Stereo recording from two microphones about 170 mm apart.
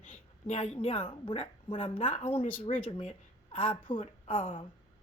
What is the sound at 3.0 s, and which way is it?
A woman's voice, 35° left (ahead or behind).